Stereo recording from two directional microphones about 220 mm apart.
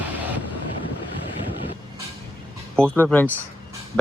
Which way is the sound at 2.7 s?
5° left (ahead or behind).